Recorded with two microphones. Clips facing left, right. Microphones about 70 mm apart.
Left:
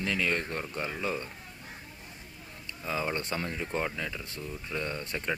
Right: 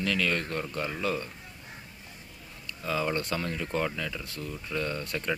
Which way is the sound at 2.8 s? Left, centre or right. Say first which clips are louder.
Right 3 dB; left.